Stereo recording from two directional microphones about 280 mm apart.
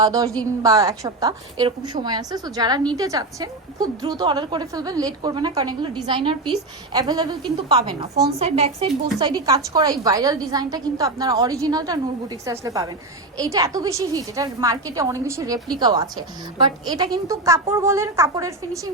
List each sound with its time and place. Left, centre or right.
0.0 s a woman's voice: centre